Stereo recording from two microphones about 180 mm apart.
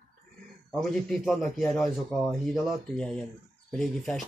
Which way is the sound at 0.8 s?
Centre (ahead or behind).